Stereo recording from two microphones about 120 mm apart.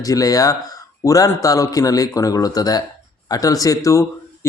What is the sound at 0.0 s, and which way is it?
A woman's voice, 30° left (ahead or behind).